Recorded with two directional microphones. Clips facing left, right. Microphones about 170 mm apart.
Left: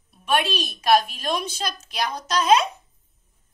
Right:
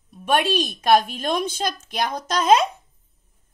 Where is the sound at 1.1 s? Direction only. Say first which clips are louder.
Right 3 dB; 55° right (ahead or behind).